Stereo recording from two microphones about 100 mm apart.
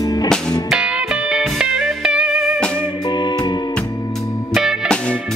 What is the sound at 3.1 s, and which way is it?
Music, 45° left (ahead or behind).